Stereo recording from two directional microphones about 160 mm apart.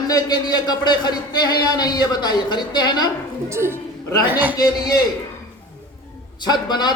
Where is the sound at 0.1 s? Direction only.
25° left (ahead or behind).